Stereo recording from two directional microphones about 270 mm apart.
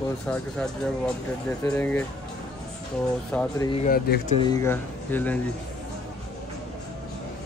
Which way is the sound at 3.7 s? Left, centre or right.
Left.